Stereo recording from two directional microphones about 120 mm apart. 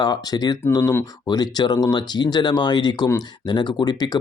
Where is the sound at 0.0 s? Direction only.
35° left (ahead or behind).